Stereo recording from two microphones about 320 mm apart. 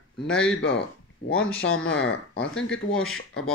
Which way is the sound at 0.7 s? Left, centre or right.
Left.